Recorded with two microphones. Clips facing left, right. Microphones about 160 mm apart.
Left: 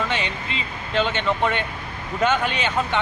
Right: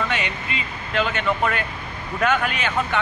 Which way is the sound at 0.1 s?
30° left (ahead or behind).